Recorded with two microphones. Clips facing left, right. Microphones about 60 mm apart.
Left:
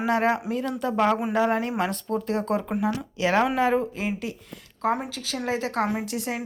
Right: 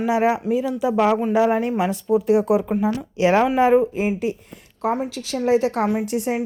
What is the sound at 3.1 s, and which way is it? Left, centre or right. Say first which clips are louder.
A woman's voice: right 6 dB; right.